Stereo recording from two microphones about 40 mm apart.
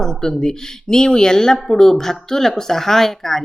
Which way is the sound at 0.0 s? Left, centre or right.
Centre.